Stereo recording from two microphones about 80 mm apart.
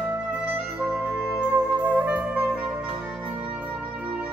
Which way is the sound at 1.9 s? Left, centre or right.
Centre.